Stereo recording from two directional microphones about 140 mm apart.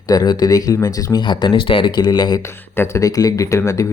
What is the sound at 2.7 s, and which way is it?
Speech, 20° left (ahead or behind).